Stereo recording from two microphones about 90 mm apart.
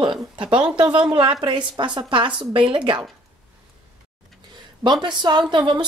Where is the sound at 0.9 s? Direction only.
65° right (ahead or behind).